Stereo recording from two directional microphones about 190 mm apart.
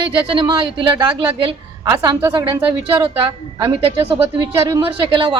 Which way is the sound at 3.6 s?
25° right (ahead or behind).